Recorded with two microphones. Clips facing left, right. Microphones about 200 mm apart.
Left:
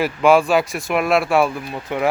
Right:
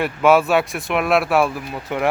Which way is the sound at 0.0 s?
Centre (ahead or behind).